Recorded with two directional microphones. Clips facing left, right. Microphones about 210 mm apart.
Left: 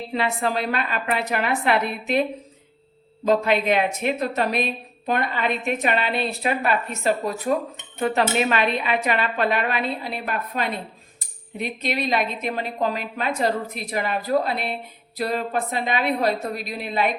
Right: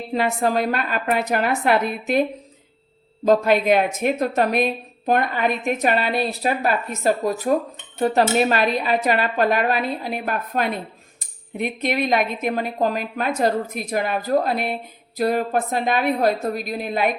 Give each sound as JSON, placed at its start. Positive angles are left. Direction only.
{"t": 0.1, "sound": "a woman's voice", "side_deg": -45}
{"t": 3.2, "sound": "a woman's voice", "side_deg": -45}